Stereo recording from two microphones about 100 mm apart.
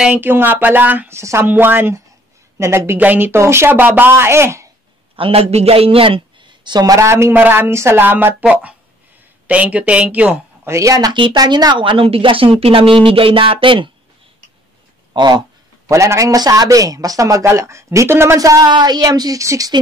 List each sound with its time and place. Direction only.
0.0 s a woman's voice: 20° right (ahead or behind)
5.1 s a man's voice: 75° right (ahead or behind); by 10.7 s 15° right (ahead or behind)
10.7 s a man's voice: 35° right (ahead or behind)
11.1 s a woman's voice: 50° right (ahead or behind)
15.1 s speech: 45° right (ahead or behind)
15.9 s a man's voice: 30° right (ahead or behind)
18.7 s a man's voice: 45° right (ahead or behind)